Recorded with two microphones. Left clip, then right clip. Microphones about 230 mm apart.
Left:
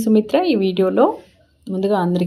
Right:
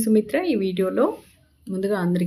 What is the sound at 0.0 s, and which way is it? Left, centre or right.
Speech, centre.